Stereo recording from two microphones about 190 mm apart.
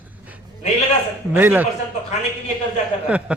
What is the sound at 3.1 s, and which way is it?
Speech, 5° right (ahead or behind).